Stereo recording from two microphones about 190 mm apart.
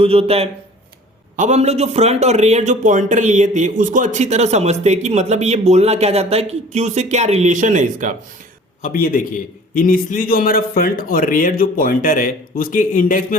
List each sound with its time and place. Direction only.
0.0 s a man's voice: 30° right (ahead or behind)
8.8 s a man's voice: 45° left (ahead or behind)